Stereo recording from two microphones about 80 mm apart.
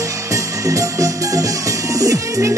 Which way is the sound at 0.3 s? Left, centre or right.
Right.